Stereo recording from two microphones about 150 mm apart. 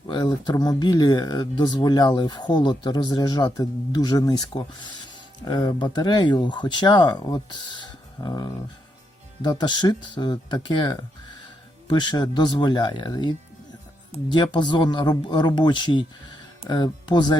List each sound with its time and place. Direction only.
0.1 s speech: 30° left (ahead or behind)